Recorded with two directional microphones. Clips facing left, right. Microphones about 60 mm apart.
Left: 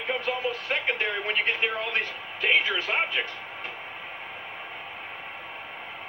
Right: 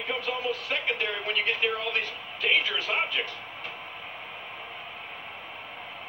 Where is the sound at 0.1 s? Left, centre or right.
Left.